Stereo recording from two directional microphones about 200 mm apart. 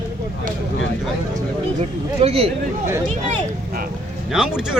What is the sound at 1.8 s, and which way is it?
Speech, 30° right (ahead or behind).